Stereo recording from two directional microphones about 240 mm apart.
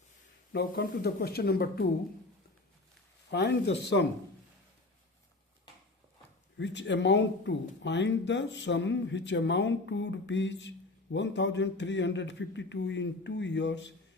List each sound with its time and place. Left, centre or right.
0.5 s speech: left
3.2 s speech: left
6.6 s speech: left